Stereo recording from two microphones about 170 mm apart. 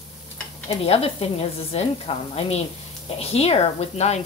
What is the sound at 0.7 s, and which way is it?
A woman's voice, 35° left (ahead or behind).